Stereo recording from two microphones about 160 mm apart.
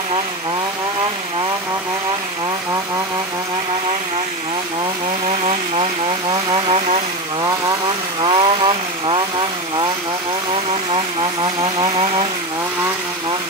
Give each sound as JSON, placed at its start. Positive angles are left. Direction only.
{"t": 6.5, "sound": "a sound", "side_deg": -45}
{"t": 8.2, "sound": "vehicle", "side_deg": -30}
{"t": 10.5, "sound": "vehicle", "side_deg": -35}
{"t": 11.6, "sound": "chainsaw", "side_deg": -35}